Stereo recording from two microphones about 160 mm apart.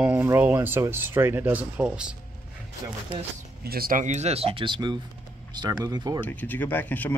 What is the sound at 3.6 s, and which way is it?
Speech, 70° right (ahead or behind).